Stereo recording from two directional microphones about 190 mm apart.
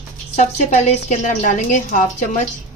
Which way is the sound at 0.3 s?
40° left (ahead or behind).